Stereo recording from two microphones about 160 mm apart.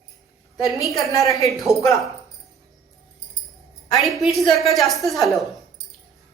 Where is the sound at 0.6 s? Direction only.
Centre (ahead or behind).